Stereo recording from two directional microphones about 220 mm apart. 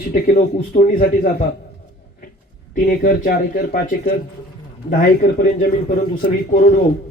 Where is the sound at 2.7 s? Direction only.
40° left (ahead or behind).